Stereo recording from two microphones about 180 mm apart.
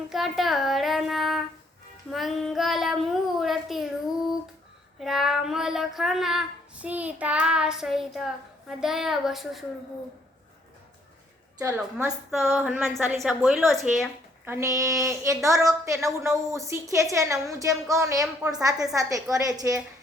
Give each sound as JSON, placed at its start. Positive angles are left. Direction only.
{"t": 0.1, "sound": "child singing", "side_deg": 0}
{"t": 4.9, "sound": "child singing", "side_deg": 0}
{"t": 11.8, "sound": "child singing", "side_deg": -5}
{"t": 14.5, "sound": "a woman's voice", "side_deg": -15}